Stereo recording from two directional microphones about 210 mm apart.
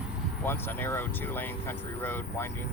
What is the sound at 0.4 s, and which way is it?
Speech, 10° left (ahead or behind).